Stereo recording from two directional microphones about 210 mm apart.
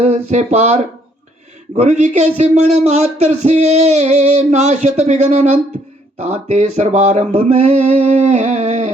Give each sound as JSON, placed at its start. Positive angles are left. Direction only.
{"t": 0.0, "sound": "speech", "side_deg": -30}